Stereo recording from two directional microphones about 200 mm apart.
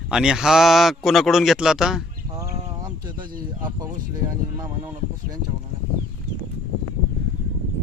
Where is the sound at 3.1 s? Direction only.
20° right (ahead or behind).